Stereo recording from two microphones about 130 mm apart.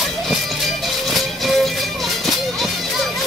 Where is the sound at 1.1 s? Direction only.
Centre (ahead or behind).